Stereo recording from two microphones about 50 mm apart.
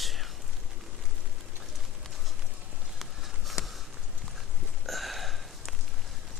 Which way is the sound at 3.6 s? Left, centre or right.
Left.